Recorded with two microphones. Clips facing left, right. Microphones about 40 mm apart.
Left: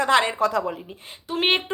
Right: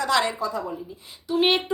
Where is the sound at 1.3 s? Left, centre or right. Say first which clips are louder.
Right 1 dB; left.